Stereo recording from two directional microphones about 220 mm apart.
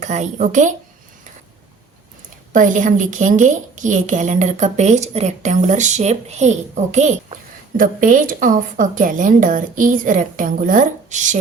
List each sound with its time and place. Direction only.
0.0 s a woman's voice: 30° right (ahead or behind)
2.5 s a woman's voice: 35° right (ahead or behind)